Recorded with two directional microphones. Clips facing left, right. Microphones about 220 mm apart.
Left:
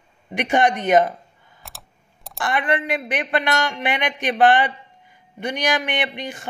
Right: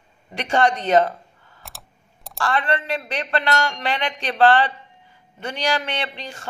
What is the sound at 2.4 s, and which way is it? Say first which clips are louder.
A man's voice: left 1 dB; 15° left (ahead or behind).